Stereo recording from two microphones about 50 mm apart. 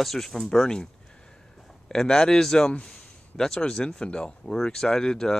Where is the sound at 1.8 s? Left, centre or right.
Centre.